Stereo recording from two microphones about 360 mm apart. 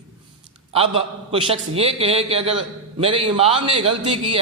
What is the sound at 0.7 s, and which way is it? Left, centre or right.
A man's voice, centre.